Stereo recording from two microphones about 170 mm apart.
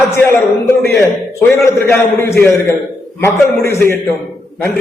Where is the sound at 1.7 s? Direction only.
15° left (ahead or behind).